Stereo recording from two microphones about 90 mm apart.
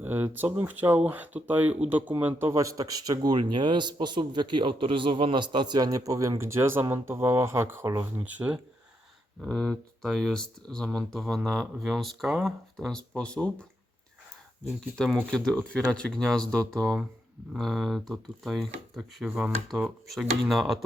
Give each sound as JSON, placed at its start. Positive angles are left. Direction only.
{"t": 0.0, "sound": "speech", "side_deg": -25}
{"t": 2.5, "sound": "a man's voice", "side_deg": -40}
{"t": 6.4, "sound": "speech", "side_deg": -30}
{"t": 8.2, "sound": "speech", "side_deg": -15}
{"t": 9.4, "sound": "speech", "side_deg": 5}
{"t": 14.9, "sound": "speech", "side_deg": 5}